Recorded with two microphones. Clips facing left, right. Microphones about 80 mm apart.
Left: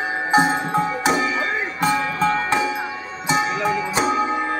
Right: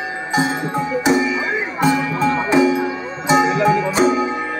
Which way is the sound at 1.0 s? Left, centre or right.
Centre.